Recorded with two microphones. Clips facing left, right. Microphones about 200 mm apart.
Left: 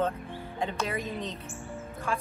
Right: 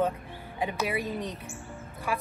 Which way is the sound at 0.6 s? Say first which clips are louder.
Right 2 dB; 10° right (ahead or behind).